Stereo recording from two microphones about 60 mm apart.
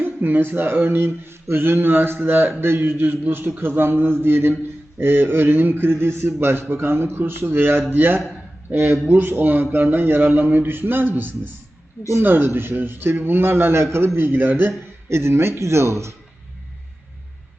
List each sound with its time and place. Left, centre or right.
0.0 s a man's voice: right
15.1 s speech: right